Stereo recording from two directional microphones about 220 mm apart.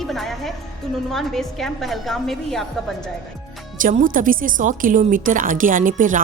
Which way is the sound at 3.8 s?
40° right (ahead or behind).